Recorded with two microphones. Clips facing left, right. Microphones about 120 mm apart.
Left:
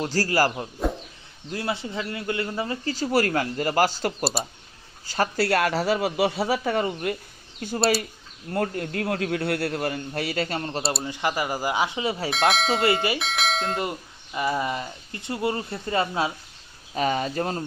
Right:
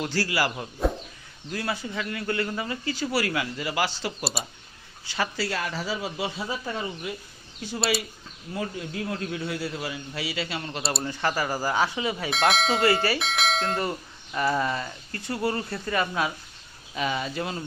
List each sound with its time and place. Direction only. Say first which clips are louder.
0.0 s speech: left 4 dB; 40° left (ahead or behind)
0.8 s bird: right 1 dB; centre (ahead or behind)
1.5 s speech: left 2 dB; 25° left (ahead or behind); by 4.1 s 45° left (ahead or behind)
4.2 s speech: left 5 dB; centre (ahead or behind)
5.0 s speech: left 4 dB; 45° left (ahead or behind)
5.4 s a man's voice: left 7 dB; 65° left (ahead or behind); by 10.7 s 50° left (ahead or behind)
10.7 s speech: left 3 dB; 35° left (ahead or behind)
11.0 s speech: left 1 dB; 15° left (ahead or behind)
12.3 s speech: even; centre (ahead or behind)
12.8 s speech: right 1 dB; 20° left (ahead or behind)
13.1 s speech: even; centre (ahead or behind)
14.3 s speech: even; 10° left (ahead or behind); by 16.3 s 25° left (ahead or behind)
16.9 s speech: left 4 dB; 45° left (ahead or behind)